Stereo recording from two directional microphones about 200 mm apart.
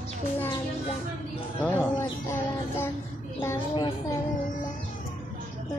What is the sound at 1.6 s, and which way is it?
Speech, 10° left (ahead or behind).